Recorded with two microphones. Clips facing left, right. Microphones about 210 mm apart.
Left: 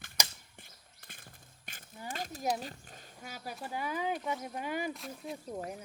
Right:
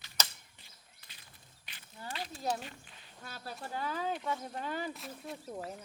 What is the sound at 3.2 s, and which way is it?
Speech, 10° left (ahead or behind).